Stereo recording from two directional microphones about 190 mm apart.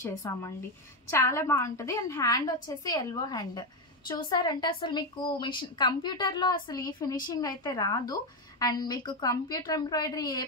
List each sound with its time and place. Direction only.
0.0 s a woman's voice: 15° left (ahead or behind)